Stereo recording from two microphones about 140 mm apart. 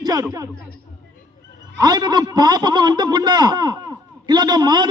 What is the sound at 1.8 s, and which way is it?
A man's voice, 30° right (ahead or behind).